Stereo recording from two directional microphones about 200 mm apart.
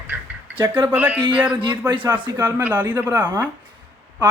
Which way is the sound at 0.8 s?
10° right (ahead or behind).